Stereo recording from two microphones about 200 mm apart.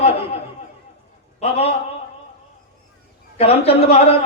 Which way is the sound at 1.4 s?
30° left (ahead or behind).